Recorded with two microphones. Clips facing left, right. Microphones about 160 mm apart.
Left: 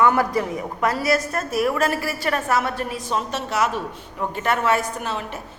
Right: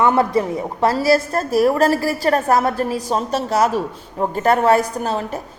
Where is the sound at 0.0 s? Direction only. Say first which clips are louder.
Right 3 dB; 25° right (ahead or behind).